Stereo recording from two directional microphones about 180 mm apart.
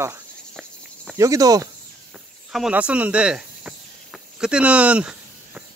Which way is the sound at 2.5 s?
5° right (ahead or behind).